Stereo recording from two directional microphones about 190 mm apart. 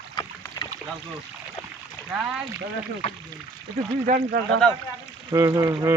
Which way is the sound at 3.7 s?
35° right (ahead or behind).